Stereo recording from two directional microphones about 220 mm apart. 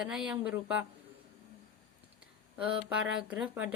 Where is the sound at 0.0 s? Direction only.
5° right (ahead or behind).